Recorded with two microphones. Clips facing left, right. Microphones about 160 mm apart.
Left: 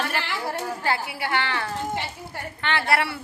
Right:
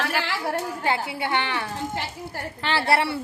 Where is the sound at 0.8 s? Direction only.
20° right (ahead or behind).